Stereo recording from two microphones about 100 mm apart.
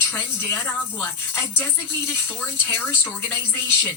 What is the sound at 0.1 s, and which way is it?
Speech, 20° left (ahead or behind).